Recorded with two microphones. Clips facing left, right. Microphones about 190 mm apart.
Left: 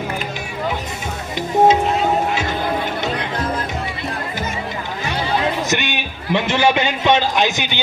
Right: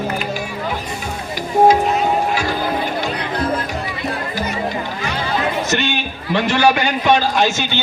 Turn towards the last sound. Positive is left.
turn(degrees=15)  # may be behind; listen again after turning